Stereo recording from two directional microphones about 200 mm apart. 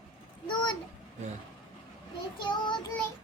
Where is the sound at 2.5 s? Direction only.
20° left (ahead or behind).